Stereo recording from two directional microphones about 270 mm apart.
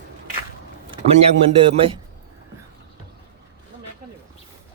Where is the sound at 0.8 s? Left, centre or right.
Right.